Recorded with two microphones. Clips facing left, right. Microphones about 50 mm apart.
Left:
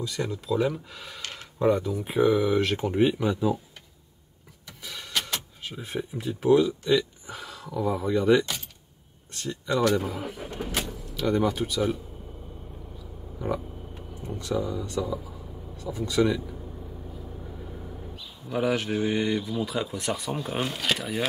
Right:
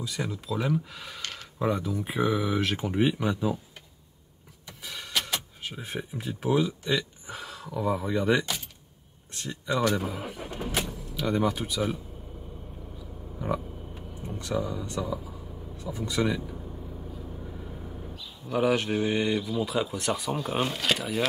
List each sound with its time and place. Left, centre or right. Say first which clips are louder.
0.0 s speech: left 3 dB; centre
4.6 s speech: even; centre
14.2 s speech: left 2 dB; right
14.8 s speech: left 2 dB; centre
18.5 s speech: right 1 dB; centre